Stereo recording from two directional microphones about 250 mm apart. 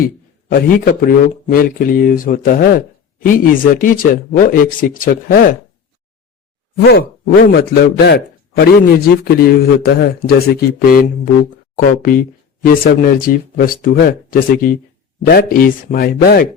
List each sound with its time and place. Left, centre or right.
1.0 s a man's voice: left
6.7 s a man's voice: left